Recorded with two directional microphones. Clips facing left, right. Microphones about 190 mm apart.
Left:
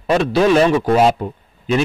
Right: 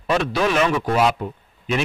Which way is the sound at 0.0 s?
35° left (ahead or behind).